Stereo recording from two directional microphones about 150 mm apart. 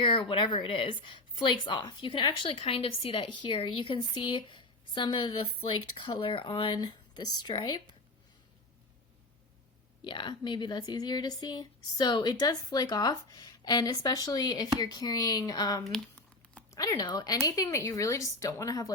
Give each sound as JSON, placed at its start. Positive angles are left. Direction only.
{"t": 0.0, "sound": "speech", "side_deg": 35}
{"t": 10.0, "sound": "speech", "side_deg": 30}